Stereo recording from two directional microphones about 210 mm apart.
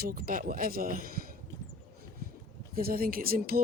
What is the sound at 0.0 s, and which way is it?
Speech, 45° right (ahead or behind).